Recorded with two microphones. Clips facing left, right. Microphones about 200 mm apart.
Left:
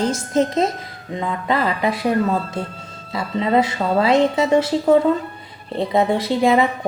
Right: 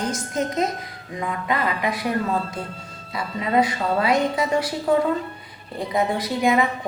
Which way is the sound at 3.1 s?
25° left (ahead or behind).